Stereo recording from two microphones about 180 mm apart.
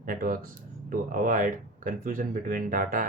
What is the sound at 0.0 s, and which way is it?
Speech, 50° right (ahead or behind).